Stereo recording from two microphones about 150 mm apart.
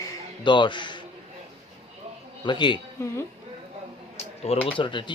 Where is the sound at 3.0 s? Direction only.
20° left (ahead or behind).